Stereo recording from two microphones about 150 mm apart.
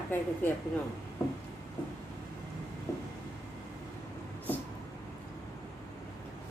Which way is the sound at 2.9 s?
20° left (ahead or behind).